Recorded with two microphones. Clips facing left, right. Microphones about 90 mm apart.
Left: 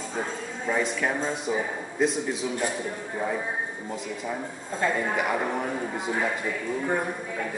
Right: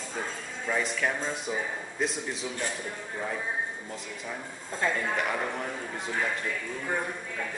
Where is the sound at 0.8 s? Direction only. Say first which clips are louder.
Left 3 dB; 10° left (ahead or behind).